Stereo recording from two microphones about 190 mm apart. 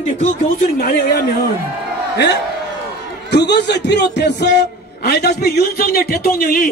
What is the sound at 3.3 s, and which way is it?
A man's voice, 60° left (ahead or behind).